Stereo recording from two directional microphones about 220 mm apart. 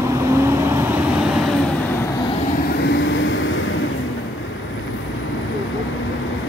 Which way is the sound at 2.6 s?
55° left (ahead or behind).